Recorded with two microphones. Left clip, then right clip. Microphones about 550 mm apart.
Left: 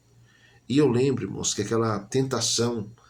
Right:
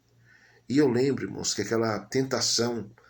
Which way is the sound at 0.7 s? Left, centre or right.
Left.